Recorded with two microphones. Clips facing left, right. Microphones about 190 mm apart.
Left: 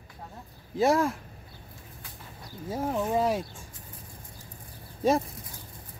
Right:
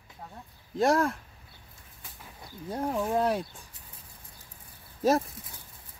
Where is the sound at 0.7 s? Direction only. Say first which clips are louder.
Left 1 dB; centre (ahead or behind).